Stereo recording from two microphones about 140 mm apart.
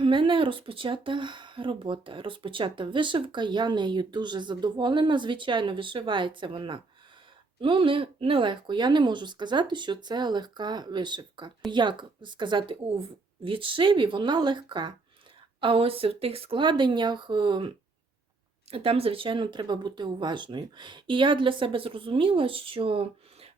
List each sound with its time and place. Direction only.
0.0 s speech: 35° right (ahead or behind)
18.7 s speech: 45° right (ahead or behind)